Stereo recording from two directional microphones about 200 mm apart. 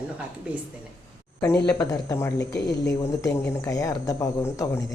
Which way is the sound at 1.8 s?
15° left (ahead or behind).